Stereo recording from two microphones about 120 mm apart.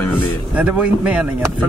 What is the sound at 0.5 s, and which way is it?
Speech, 10° right (ahead or behind).